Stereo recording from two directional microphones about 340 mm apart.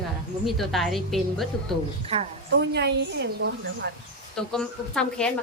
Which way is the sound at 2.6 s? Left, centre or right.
Right.